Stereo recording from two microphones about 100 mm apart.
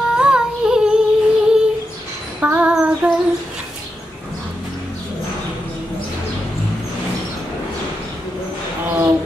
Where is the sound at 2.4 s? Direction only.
15° right (ahead or behind).